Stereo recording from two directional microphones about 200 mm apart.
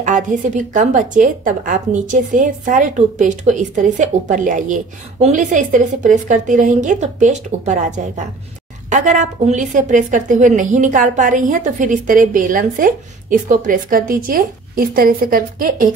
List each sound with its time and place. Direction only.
0.0 s a woman's voice: 40° right (ahead or behind)